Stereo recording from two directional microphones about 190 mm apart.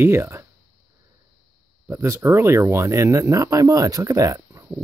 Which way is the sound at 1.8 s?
15° right (ahead or behind).